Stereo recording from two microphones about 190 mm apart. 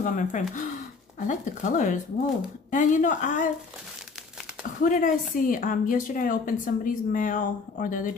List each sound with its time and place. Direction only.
0.0 s speech: 45° left (ahead or behind)
4.8 s a woman's voice: 45° left (ahead or behind)